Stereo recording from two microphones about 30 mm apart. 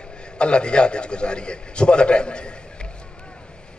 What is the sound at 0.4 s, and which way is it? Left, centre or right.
A man's voice, left.